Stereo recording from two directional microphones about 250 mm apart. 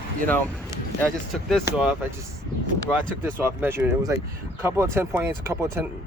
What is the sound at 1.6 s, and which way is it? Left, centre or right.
Speech, centre.